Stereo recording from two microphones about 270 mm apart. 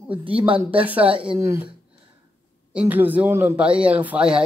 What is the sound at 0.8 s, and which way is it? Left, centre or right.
Speech, centre.